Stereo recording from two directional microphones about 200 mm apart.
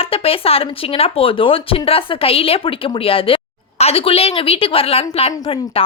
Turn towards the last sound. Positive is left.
turn(degrees=25)  # may be behind; listen again after turning